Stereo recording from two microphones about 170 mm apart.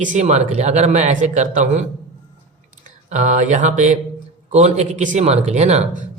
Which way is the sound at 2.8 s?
45° right (ahead or behind).